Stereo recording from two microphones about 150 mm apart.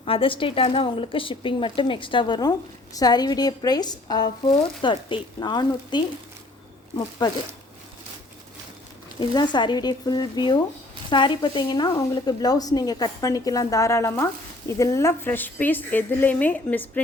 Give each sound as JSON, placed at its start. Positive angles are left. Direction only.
{"t": 0.0, "sound": "speech", "side_deg": 40}
{"t": 9.3, "sound": "a woman's voice", "side_deg": 30}